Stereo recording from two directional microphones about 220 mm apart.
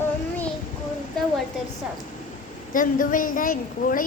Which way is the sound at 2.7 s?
40° left (ahead or behind).